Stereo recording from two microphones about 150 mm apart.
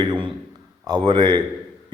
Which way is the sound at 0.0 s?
30° right (ahead or behind).